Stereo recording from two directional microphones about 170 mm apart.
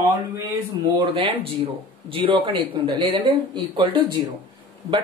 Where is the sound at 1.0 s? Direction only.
30° right (ahead or behind).